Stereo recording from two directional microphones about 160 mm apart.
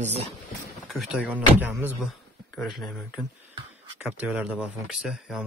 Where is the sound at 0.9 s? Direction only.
Centre (ahead or behind).